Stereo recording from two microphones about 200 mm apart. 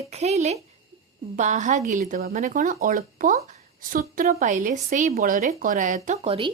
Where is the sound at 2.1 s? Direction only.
50° right (ahead or behind).